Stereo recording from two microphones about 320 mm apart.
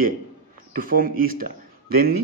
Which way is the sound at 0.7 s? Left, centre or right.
Right.